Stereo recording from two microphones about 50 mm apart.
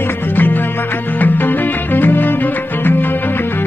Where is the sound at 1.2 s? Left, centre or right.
Left.